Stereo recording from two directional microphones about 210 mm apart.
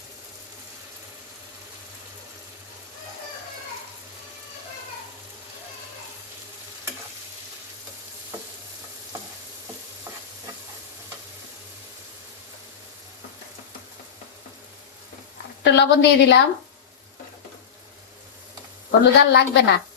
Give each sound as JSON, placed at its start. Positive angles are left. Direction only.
{"t": 15.6, "sound": "a woman's voice", "side_deg": 55}
{"t": 18.9, "sound": "a woman's voice", "side_deg": 55}